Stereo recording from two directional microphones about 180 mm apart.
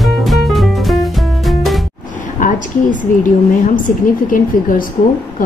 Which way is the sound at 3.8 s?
50° left (ahead or behind).